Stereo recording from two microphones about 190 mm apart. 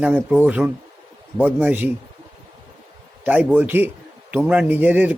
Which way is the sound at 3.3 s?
10° right (ahead or behind).